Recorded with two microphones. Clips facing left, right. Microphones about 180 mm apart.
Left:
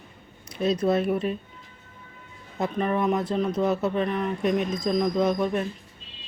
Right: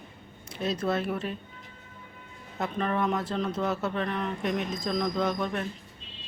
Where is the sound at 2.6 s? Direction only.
15° left (ahead or behind).